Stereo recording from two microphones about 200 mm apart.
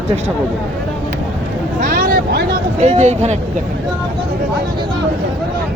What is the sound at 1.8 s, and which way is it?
Vehicle, 45° right (ahead or behind).